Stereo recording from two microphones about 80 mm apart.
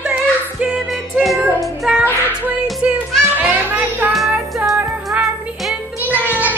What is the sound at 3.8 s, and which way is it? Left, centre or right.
Music, right.